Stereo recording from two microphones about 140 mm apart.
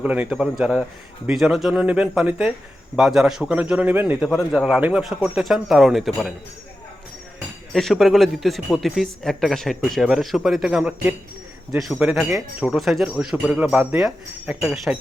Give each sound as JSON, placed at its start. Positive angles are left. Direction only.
{"t": 0.0, "sound": "a man's voice", "side_deg": -10}
{"t": 7.7, "sound": "speech", "side_deg": 0}